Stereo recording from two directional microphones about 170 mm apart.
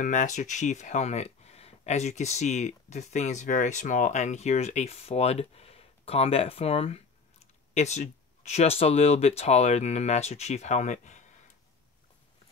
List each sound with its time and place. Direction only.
0.0 s speech: 45° left (ahead or behind)